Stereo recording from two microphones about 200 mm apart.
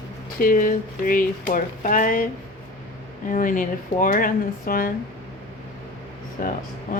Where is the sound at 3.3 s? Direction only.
40° left (ahead or behind).